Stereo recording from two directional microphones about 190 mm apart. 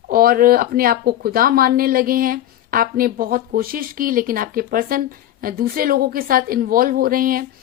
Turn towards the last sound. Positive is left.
turn(degrees=-50)  # may be behind; listen again after turning